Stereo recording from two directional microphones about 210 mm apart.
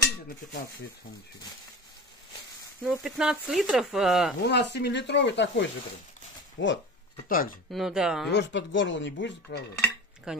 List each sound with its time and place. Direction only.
2.8 s speech: centre (ahead or behind)
4.4 s speech: 55° left (ahead or behind)
7.2 s speech: 40° left (ahead or behind)
7.7 s speech: centre (ahead or behind)
8.3 s speech: 60° left (ahead or behind)
10.3 s speech: 5° right (ahead or behind)